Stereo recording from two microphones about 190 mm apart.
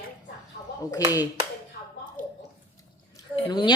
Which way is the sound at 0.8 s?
20° left (ahead or behind).